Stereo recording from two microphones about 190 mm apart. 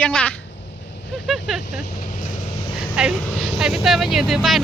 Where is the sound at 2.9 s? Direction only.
5° right (ahead or behind).